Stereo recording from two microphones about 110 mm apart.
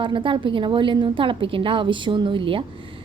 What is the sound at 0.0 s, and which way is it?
A woman's voice, 50° right (ahead or behind).